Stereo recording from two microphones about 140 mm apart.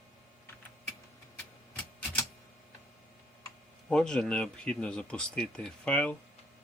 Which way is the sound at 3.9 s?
5° left (ahead or behind).